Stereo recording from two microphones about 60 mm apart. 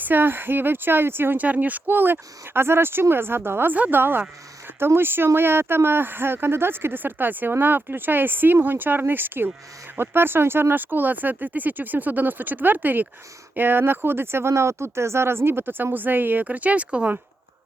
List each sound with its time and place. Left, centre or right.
0.0 s speech: right
1.5 s speech: right